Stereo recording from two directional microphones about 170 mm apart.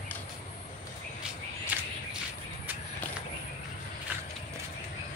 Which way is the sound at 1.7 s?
10° right (ahead or behind).